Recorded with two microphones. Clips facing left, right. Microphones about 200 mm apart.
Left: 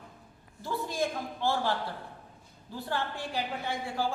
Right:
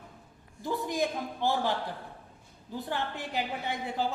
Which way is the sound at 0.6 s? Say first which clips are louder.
Right 2 dB; 15° right (ahead or behind).